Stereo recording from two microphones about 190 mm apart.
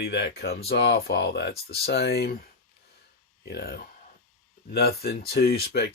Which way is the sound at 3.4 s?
55° left (ahead or behind).